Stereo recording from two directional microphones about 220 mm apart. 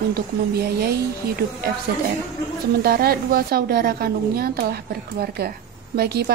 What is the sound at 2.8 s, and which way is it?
A woman's voice, 45° right (ahead or behind).